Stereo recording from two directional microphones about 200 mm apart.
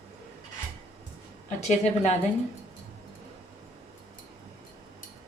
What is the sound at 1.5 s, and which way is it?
Speech, 35° left (ahead or behind).